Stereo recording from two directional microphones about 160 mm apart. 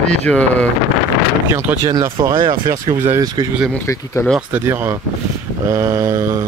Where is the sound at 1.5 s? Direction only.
15° right (ahead or behind).